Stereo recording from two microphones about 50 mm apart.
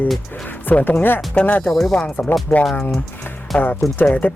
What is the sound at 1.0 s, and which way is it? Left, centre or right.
Speech, left.